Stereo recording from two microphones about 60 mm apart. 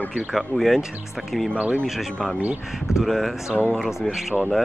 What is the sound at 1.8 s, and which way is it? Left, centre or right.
Speech, centre.